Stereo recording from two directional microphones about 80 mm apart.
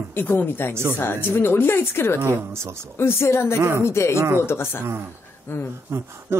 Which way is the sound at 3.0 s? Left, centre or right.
Left.